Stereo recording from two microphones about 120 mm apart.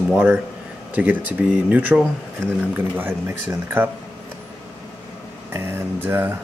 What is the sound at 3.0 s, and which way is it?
Speech, 20° right (ahead or behind).